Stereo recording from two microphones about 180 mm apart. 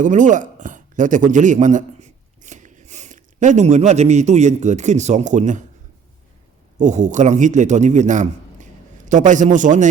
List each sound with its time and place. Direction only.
0.0 s speech: 45° right (ahead or behind)
6.7 s a man's voice: 45° right (ahead or behind)